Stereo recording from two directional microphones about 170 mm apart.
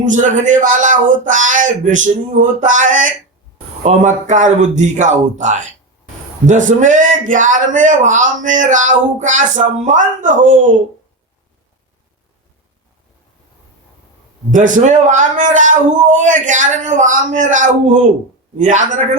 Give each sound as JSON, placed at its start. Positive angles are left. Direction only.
{"t": 0.0, "sound": "a man's voice", "side_deg": -50}
{"t": 14.5, "sound": "a man's voice", "side_deg": -50}